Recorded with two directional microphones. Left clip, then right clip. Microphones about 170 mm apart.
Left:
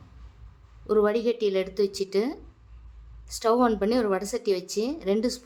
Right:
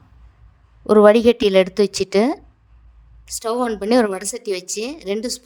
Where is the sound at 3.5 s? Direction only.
45° right (ahead or behind).